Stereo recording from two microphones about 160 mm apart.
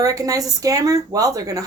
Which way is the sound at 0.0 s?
20° right (ahead or behind).